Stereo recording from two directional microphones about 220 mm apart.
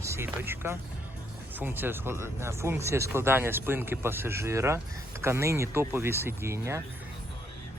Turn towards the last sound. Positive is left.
turn(degrees=-15)  # may be behind; listen again after turning